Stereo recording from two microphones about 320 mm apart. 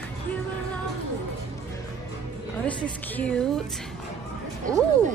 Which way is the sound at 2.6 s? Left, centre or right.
Centre.